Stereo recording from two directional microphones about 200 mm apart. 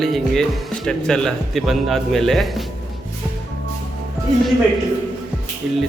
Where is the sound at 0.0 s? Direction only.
Centre (ahead or behind).